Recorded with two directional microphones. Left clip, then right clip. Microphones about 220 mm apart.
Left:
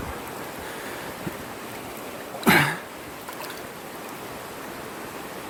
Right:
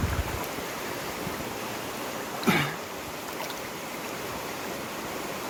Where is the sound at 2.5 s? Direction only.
30° left (ahead or behind).